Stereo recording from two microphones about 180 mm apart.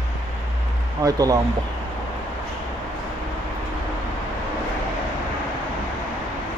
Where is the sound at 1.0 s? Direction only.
20° right (ahead or behind).